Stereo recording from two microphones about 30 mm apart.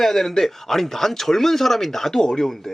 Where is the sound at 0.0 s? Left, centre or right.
Centre.